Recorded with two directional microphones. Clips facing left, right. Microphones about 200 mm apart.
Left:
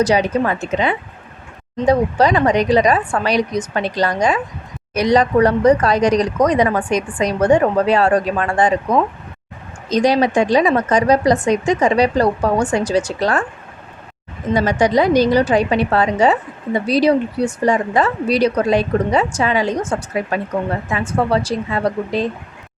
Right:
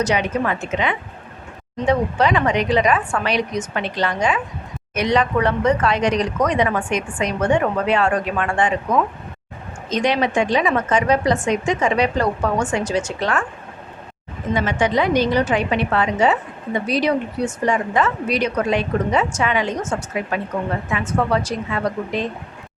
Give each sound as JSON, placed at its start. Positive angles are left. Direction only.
{"t": 0.0, "sound": "a woman's voice", "side_deg": 35}
{"t": 14.5, "sound": "a woman's voice", "side_deg": 40}